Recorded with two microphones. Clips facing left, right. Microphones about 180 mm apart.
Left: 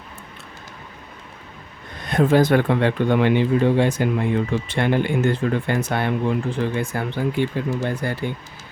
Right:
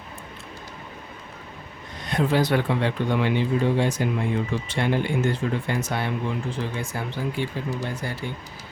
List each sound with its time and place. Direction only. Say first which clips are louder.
2.0 s speech: left 6 dB; 50° left (ahead or behind)